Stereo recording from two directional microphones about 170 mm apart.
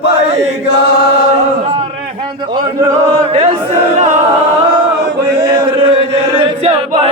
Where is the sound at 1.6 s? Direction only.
30° right (ahead or behind).